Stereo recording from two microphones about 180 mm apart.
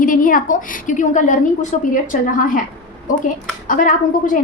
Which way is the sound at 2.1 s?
45° left (ahead or behind).